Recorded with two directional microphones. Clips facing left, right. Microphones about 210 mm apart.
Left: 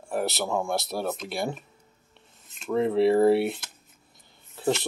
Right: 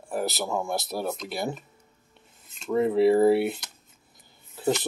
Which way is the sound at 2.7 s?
5° right (ahead or behind).